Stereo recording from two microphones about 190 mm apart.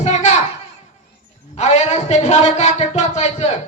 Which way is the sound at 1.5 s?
35° left (ahead or behind).